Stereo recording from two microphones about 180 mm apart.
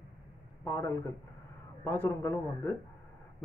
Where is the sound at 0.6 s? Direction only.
15° left (ahead or behind).